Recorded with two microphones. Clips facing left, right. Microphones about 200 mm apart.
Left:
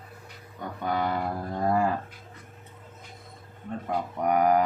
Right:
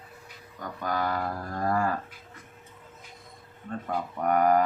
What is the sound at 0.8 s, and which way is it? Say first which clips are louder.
Speech: left 1 dB; 20° left (ahead or behind).